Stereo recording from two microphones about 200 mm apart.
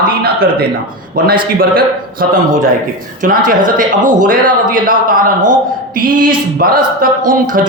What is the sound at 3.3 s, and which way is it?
Speech, 45° right (ahead or behind).